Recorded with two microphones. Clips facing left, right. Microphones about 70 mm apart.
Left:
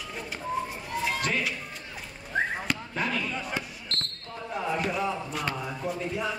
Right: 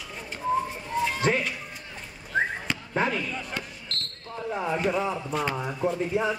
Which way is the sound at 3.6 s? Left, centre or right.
Centre.